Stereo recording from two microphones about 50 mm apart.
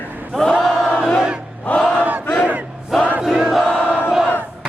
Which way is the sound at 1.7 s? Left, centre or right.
Left.